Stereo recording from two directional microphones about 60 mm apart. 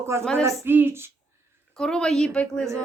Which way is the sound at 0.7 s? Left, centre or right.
Right.